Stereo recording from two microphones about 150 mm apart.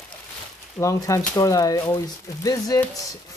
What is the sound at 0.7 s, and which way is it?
Speech, 20° left (ahead or behind).